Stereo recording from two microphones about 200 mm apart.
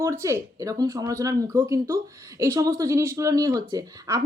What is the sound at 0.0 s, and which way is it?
Speech, 15° right (ahead or behind).